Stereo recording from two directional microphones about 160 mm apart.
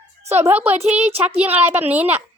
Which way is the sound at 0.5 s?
10° right (ahead or behind).